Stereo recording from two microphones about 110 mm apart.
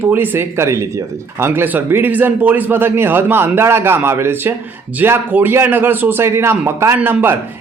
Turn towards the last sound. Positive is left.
turn(degrees=-20)  # may be behind; listen again after turning